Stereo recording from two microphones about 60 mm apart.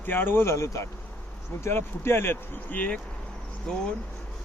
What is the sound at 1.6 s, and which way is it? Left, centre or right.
Speech, left.